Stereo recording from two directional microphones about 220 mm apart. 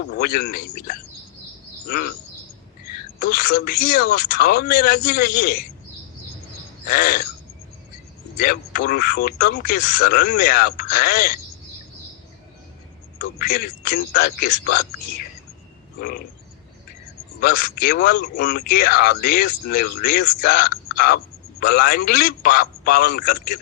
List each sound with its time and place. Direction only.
0.1 s a man's voice: 45° left (ahead or behind)
3.2 s a man's voice: 45° left (ahead or behind)
6.8 s a man's voice: 45° left (ahead or behind)
8.4 s a man's voice: 45° left (ahead or behind)
13.2 s a man's voice: 45° left (ahead or behind)
16.0 s frog: 40° left (ahead or behind)
17.4 s a man's voice: 45° left (ahead or behind)